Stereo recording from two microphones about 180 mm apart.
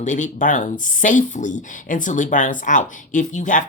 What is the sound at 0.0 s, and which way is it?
Speech, 45° left (ahead or behind).